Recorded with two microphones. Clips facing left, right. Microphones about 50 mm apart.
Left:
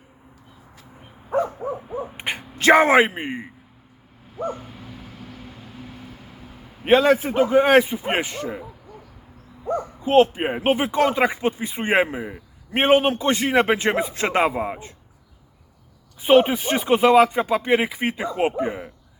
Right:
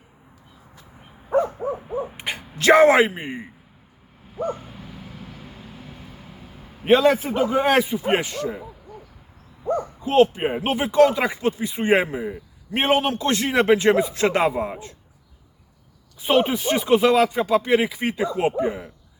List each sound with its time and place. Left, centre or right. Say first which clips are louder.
1.5 s a sound: right 2 dB; centre
2.1 s speech: left 1 dB; left
4.4 s dog: right 1 dB; centre
6.8 s a man's voice: even; centre
9.7 s speech: left 1 dB; centre; by 12.2 s left
12.2 s a man's voice: right 4 dB; centre
12.8 s speech: left 3 dB; left
16.2 s speech: left 3 dB; centre